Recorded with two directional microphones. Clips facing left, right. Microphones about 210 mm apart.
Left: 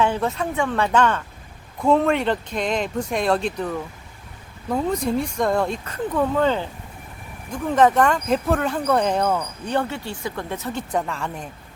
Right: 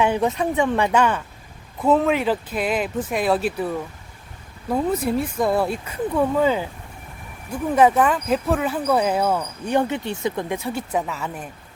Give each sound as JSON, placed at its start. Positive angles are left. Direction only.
{"t": 0.0, "sound": "speech", "side_deg": -15}